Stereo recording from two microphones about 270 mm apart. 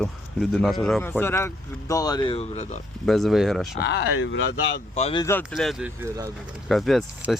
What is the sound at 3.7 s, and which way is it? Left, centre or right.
Speech, left.